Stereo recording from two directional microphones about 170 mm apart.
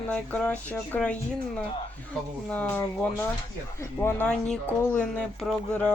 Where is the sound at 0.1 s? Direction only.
10° left (ahead or behind).